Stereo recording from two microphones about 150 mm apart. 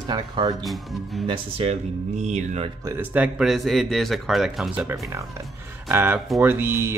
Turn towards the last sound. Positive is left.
turn(degrees=-15)  # may be behind; listen again after turning